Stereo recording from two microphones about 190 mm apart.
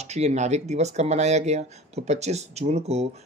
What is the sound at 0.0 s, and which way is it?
Speech, 35° right (ahead or behind).